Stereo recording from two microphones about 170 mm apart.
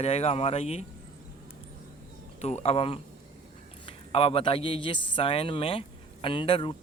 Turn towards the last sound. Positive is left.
turn(degrees=30)  # may be behind; listen again after turning